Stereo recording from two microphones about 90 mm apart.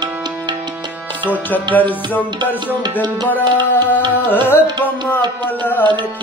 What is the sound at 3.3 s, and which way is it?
Music, 20° left (ahead or behind).